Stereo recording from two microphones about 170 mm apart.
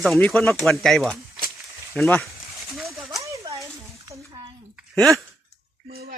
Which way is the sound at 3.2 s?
20° right (ahead or behind).